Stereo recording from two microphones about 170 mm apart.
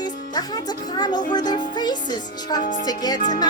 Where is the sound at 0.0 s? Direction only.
25° left (ahead or behind).